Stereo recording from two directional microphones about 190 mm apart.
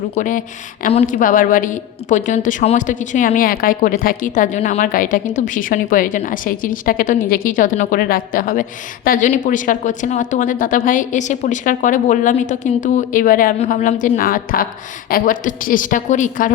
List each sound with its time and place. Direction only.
0.1 s a woman's voice: 45° left (ahead or behind)